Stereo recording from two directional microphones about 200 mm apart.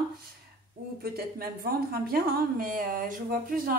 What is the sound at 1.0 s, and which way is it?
A woman's voice, 50° right (ahead or behind).